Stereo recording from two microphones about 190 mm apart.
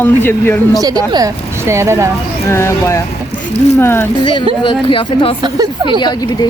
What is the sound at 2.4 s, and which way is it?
Speech, 15° left (ahead or behind).